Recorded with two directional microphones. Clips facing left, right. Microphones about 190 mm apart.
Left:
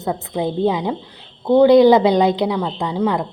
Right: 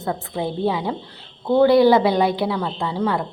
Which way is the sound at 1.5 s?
15° left (ahead or behind).